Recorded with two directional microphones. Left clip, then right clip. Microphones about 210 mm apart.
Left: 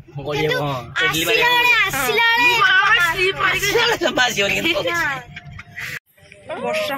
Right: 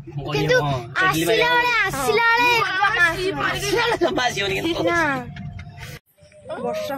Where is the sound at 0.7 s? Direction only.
45° right (ahead or behind).